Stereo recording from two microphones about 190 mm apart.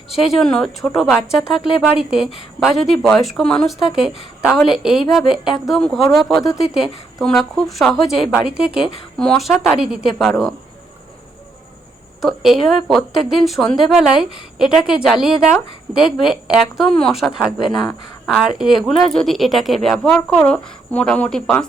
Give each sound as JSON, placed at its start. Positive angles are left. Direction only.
{"t": 0.1, "sound": "speech", "side_deg": 0}
{"t": 6.4, "sound": "speech", "side_deg": 15}
{"t": 6.7, "sound": "speech", "side_deg": 0}
{"t": 12.2, "sound": "speech", "side_deg": 0}